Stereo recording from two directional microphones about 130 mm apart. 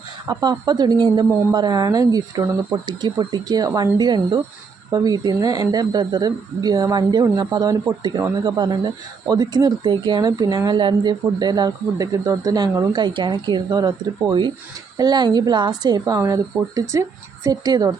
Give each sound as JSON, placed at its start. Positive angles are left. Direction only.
{"t": 0.3, "sound": "speech", "side_deg": -30}